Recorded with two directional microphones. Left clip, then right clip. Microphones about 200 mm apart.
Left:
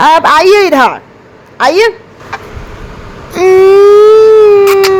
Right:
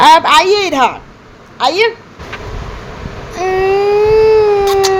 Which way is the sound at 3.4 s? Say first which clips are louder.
Left 9 dB; 30° left (ahead or behind).